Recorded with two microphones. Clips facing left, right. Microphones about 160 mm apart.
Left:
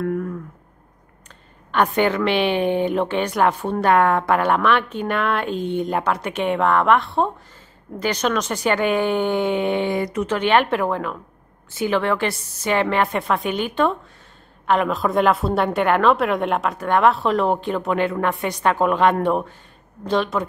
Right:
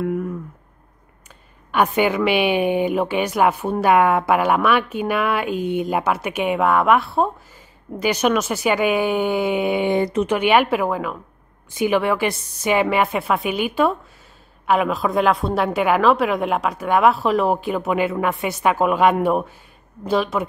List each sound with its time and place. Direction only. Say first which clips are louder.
0.0 s a sound: right 1 dB; 10° right (ahead or behind)
1.7 s a woman's voice: even; 10° right (ahead or behind)
9.8 s speech: right 4 dB; 25° right (ahead or behind)
10.2 s a woman's voice: left 1 dB; 10° right (ahead or behind)